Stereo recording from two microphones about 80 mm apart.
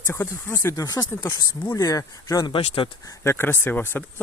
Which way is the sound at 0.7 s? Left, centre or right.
Left.